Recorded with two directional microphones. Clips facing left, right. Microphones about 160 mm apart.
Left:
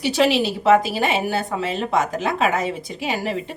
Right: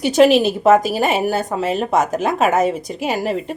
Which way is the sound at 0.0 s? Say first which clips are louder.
Right 6 dB; 45° right (ahead or behind).